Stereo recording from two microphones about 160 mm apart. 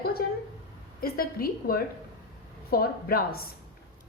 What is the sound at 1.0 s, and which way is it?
A woman's voice, 65° left (ahead or behind).